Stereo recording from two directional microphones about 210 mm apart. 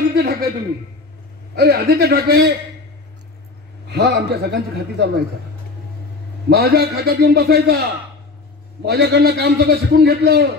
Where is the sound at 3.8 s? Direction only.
55° right (ahead or behind).